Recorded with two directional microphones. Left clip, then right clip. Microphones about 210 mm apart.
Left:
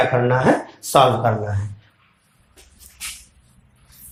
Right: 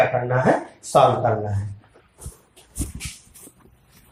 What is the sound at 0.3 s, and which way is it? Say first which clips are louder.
Speech: left 2 dB; 30° left (ahead or behind).